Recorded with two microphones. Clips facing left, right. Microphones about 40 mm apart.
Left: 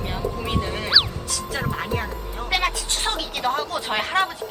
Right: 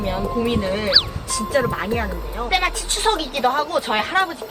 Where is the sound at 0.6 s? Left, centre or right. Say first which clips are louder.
Right 2 dB; centre.